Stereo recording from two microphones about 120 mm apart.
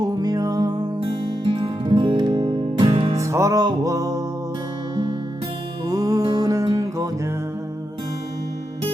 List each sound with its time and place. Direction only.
0.0 s music: 30° right (ahead or behind)
1.5 s music: 45° right (ahead or behind)
3.2 s music: 25° right (ahead or behind)
5.8 s music: 30° right (ahead or behind)